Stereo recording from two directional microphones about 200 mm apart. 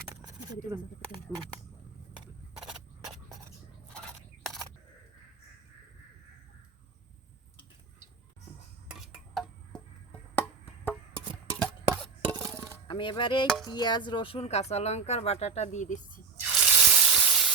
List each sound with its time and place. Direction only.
0.1 s a sound: 15° right (ahead or behind)
8.9 s a sound: centre (ahead or behind)
10.8 s music: 5° left (ahead or behind)
12.9 s chopping: 25° left (ahead or behind)
13.7 s speech: 20° left (ahead or behind); by 16.2 s 35° left (ahead or behind)
16.4 s drip: 5° right (ahead or behind)